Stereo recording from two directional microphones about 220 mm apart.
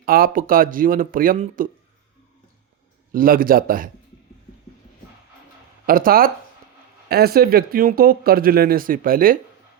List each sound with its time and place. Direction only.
0.0 s speech: 40° right (ahead or behind)
3.1 s speech: 40° right (ahead or behind)
5.8 s speech: 40° right (ahead or behind)